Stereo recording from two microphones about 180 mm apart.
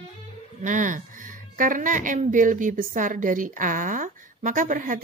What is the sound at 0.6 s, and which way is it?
Speech, 45° right (ahead or behind).